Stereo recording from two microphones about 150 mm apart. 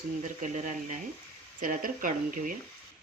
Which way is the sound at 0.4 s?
55° right (ahead or behind).